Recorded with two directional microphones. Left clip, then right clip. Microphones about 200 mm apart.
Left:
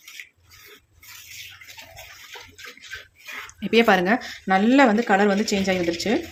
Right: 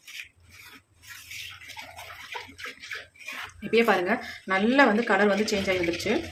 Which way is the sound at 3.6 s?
40° left (ahead or behind).